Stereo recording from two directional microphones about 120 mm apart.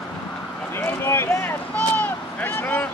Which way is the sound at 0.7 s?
20° left (ahead or behind).